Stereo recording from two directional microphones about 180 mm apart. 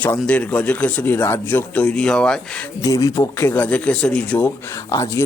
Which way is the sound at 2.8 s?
20° left (ahead or behind).